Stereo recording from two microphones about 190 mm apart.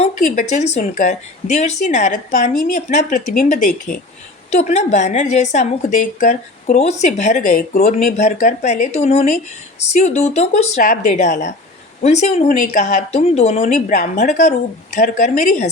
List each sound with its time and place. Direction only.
0.0 s a woman's voice: 40° left (ahead or behind)